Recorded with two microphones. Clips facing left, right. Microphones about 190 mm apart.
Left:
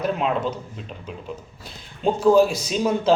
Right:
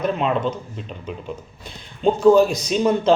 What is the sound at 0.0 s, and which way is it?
Speech, 5° left (ahead or behind).